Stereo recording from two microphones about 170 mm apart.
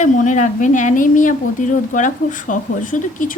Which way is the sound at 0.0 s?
50° left (ahead or behind).